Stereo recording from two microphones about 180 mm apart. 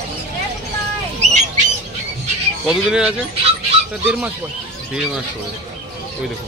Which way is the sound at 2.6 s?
5° right (ahead or behind).